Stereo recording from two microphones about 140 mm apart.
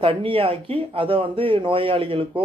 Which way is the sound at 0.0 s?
40° right (ahead or behind).